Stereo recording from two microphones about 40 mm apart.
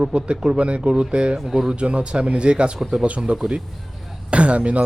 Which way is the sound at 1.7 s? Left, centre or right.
Right.